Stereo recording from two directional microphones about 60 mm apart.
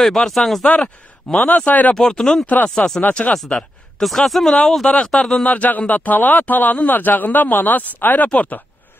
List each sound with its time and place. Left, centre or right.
0.0 s speech: centre
1.6 s speech: left
2.0 s speech: centre
2.4 s speech: left
2.7 s speech: centre
3.0 s speech: left
4.0 s speech: centre
5.4 s speech: left